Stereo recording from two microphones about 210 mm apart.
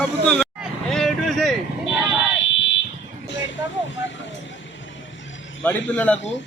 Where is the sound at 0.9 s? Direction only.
Centre (ahead or behind).